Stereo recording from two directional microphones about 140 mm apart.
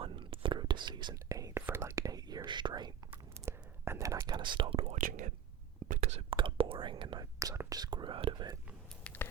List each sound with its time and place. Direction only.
0.0 s whispering: 40° right (ahead or behind)
3.1 s whispering: 20° right (ahead or behind); by 4.9 s 45° right (ahead or behind)
4.9 s speech: 70° right (ahead or behind)
5.9 s whispering: 55° right (ahead or behind)
6.3 s whispering: 40° right (ahead or behind)
7.3 s speech: 20° right (ahead or behind)
9.0 s a sound: 15° left (ahead or behind)